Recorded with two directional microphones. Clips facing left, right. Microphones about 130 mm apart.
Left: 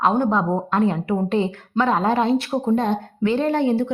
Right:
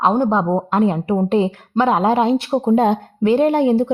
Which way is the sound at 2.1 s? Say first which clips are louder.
Right 3 dB; 25° right (ahead or behind).